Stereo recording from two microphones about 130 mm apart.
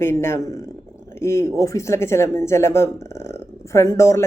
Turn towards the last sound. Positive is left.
turn(degrees=20)  # may be behind; listen again after turning